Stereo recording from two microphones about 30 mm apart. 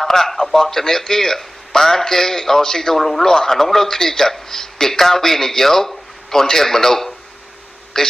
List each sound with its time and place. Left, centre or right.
0.0 s a man's voice: centre